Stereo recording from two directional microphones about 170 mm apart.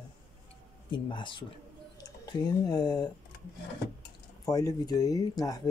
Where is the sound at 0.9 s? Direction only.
30° left (ahead or behind).